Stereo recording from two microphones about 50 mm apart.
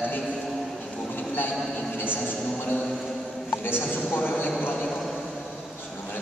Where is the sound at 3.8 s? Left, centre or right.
Left.